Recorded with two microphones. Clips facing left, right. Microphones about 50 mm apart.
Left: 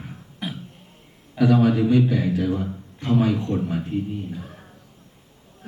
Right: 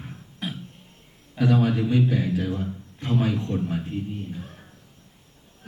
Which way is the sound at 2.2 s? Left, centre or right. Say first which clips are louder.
Left 3 dB; left.